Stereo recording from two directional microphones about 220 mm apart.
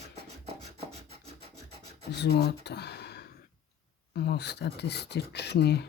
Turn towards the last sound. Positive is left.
turn(degrees=50)  # may be behind; listen again after turning